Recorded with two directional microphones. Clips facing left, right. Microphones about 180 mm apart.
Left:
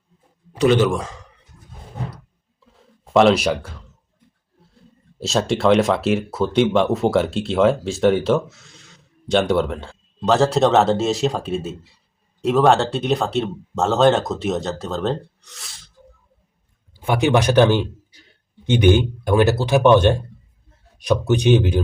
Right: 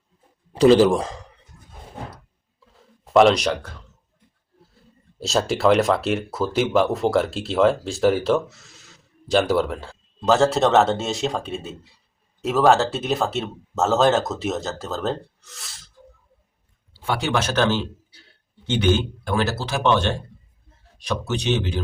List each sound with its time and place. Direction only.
0.5 s a man's voice: 35° right (ahead or behind)
2.7 s a sound: centre (ahead or behind)
4.6 s speech: centre (ahead or behind)
17.0 s a man's voice: 15° left (ahead or behind)
21.2 s speech: 15° left (ahead or behind)